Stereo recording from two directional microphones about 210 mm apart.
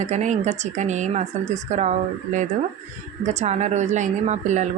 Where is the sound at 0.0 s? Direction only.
35° right (ahead or behind).